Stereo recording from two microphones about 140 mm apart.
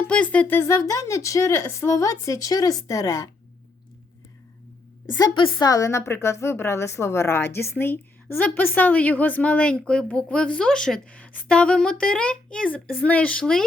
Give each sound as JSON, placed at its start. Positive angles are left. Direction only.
{"t": 0.1, "sound": "speech", "side_deg": 10}
{"t": 5.1, "sound": "a woman's voice", "side_deg": 30}